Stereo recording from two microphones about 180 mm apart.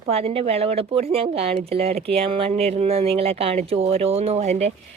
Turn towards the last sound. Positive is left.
turn(degrees=-35)  # may be behind; listen again after turning